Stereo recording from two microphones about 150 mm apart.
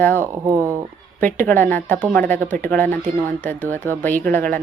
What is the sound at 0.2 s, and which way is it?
Speech, 20° right (ahead or behind).